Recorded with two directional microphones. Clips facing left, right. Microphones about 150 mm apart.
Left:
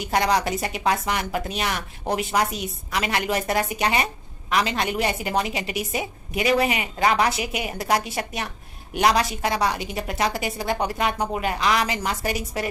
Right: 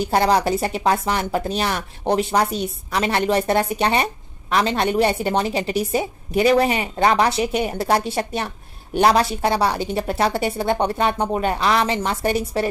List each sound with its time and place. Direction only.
0.0 s a woman's voice: 30° right (ahead or behind)